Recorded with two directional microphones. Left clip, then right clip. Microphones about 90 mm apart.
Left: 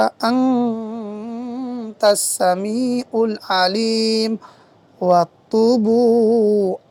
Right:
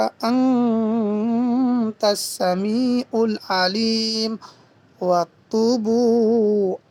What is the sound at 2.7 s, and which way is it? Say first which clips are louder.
Speech: even; 45° left (ahead or behind).